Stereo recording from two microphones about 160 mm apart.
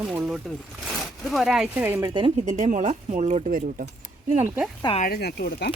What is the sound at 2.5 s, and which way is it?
Speech, 50° right (ahead or behind).